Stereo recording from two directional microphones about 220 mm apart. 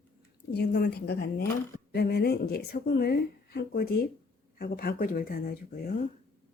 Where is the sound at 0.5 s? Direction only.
50° left (ahead or behind).